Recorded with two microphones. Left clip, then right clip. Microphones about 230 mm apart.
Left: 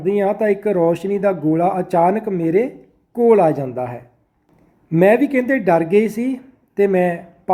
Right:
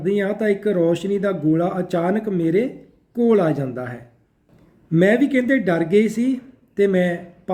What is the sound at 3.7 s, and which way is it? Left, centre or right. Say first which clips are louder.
Speech: left 5 dB; left.